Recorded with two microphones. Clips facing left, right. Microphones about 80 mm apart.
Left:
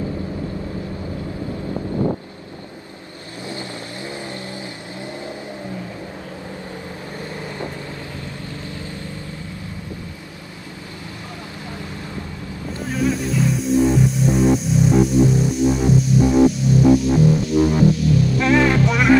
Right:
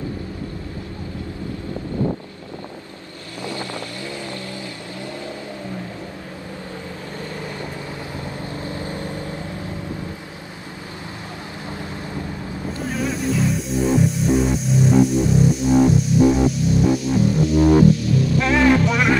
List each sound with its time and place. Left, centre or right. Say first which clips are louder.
8.6 s vehicle: right 4 dB; right
12.9 s music: left 3 dB; centre